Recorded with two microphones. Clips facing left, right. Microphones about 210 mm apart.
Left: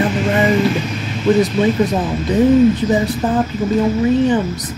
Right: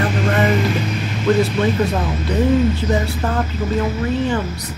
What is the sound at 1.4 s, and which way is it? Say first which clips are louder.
Speech: left 3 dB; 15° left (ahead or behind).